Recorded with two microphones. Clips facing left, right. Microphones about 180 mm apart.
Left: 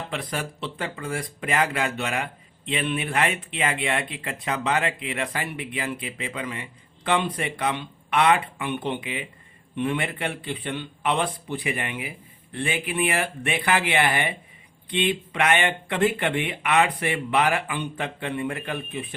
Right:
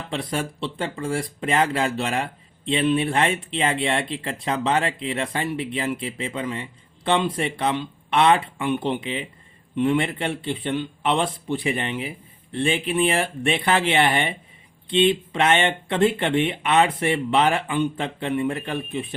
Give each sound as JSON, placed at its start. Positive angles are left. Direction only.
{"t": 0.1, "sound": "speech", "side_deg": -25}